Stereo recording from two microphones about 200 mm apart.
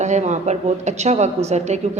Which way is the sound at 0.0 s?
35° right (ahead or behind).